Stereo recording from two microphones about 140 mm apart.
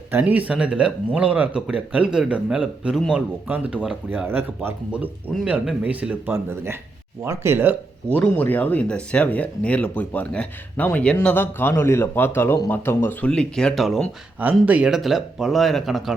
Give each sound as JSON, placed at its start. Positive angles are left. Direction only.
{"t": 0.1, "sound": "speech", "side_deg": -10}
{"t": 8.1, "sound": "speech", "side_deg": 10}